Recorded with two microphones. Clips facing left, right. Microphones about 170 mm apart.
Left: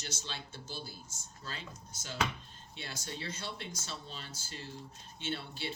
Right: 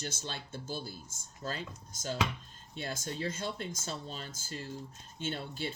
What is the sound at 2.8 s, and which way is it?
Speech, 45° right (ahead or behind).